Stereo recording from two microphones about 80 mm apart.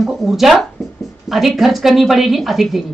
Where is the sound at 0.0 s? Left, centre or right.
Centre.